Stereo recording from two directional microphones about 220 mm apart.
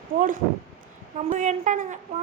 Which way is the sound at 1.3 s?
35° right (ahead or behind).